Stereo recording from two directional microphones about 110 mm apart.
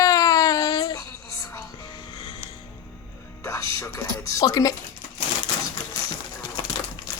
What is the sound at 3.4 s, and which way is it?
Music, 30° left (ahead or behind).